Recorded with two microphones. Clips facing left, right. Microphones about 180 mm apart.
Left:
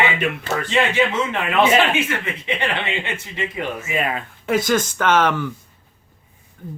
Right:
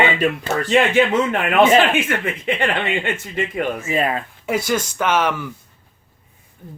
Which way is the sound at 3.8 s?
30° right (ahead or behind).